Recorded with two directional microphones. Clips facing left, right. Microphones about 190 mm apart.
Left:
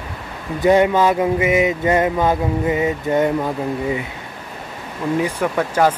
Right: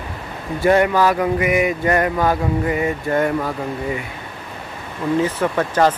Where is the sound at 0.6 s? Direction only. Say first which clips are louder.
Left 1 dB; 20° left (ahead or behind).